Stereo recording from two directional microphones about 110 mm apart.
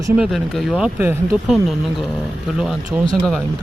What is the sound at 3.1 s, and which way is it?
Speech, centre (ahead or behind).